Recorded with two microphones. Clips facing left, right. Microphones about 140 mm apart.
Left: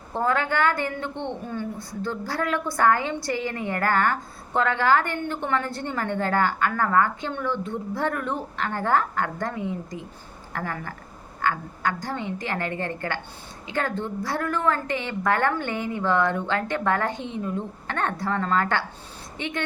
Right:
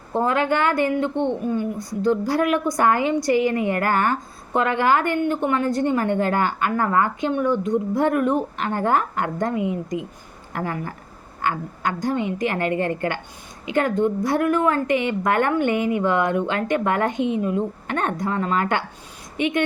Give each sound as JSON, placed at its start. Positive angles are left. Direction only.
{"t": 0.1, "sound": "a woman's voice", "side_deg": -20}